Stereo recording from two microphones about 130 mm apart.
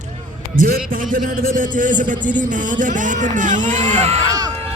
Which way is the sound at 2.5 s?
80° right.